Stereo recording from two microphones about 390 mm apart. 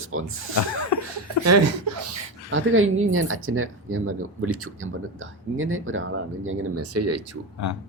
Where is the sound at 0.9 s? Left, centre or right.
Left.